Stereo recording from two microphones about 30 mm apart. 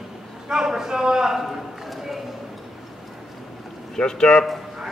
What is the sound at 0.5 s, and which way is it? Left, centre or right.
Speech, centre.